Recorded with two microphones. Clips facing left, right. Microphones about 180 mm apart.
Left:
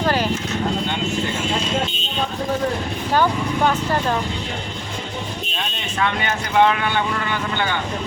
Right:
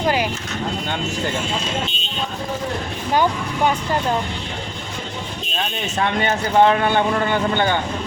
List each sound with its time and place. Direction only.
0.0 s a sound: 15° right (ahead or behind)
3.2 s vehicle: 15° right (ahead or behind)
6.0 s speech: 40° right (ahead or behind)